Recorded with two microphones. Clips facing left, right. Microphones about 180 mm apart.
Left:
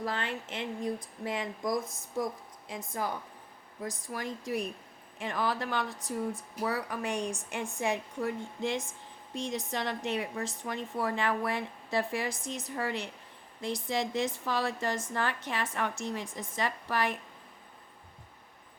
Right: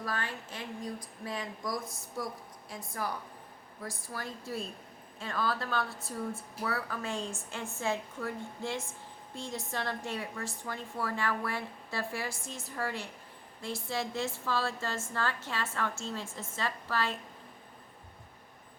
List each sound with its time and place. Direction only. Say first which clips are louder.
0.0 s a woman's voice: left 3 dB; 20° left (ahead or behind)